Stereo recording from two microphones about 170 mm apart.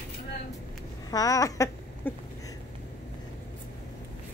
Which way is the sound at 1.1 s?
20° left (ahead or behind).